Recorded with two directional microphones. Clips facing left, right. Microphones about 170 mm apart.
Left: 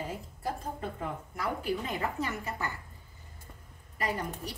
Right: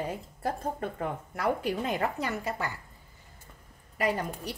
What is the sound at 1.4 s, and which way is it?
A woman's voice, 75° right (ahead or behind).